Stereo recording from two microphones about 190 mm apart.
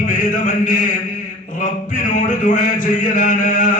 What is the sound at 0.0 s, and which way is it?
Mantra, 40° left (ahead or behind).